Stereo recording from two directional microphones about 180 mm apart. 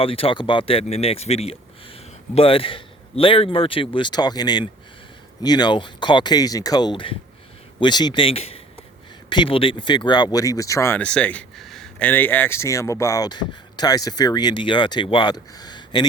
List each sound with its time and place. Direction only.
0.0 s speech: 30° left (ahead or behind)